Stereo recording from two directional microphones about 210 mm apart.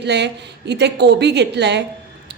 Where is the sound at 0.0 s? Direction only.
55° right (ahead or behind).